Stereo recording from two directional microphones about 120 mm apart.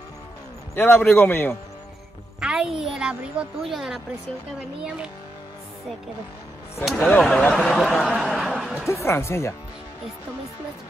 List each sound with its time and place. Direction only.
0.7 s a man's voice: 20° left (ahead or behind)
2.4 s a woman's voice: 5° right (ahead or behind)
7.0 s a man's voice: 10° left (ahead or behind)
8.4 s a sound: 5° right (ahead or behind)
8.8 s speech: 20° left (ahead or behind)